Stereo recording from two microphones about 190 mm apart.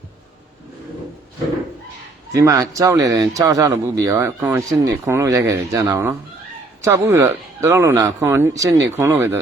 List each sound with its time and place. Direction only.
2.3 s speech: 15° right (ahead or behind)